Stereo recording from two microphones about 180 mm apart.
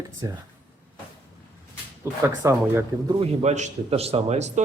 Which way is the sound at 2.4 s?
15° right (ahead or behind).